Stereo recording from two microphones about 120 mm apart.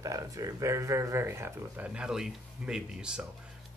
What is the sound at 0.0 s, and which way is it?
Speech, 30° right (ahead or behind).